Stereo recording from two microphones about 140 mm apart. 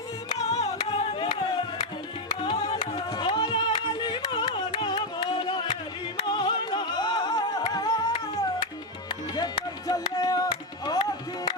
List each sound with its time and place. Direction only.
0.3 s music: 50° left (ahead or behind)
0.9 s music: 35° left (ahead or behind)
2.5 s music: 45° left (ahead or behind)
3.1 s music: 30° left (ahead or behind)